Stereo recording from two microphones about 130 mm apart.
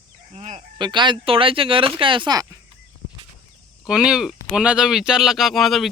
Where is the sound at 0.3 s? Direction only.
65° right (ahead or behind).